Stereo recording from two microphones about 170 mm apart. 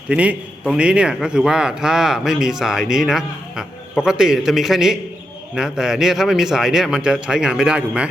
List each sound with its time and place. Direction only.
0.1 s a man's voice: 5° right (ahead or behind)